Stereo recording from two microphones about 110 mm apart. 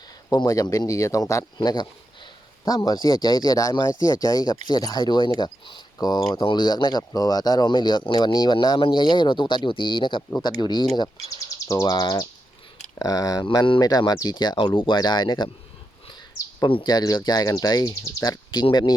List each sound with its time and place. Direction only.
0.3 s speech: 35° left (ahead or behind)
1.5 s speech: 40° left (ahead or behind)
8.5 s speech: 50° left (ahead or behind)
16.6 s speech: 45° left (ahead or behind)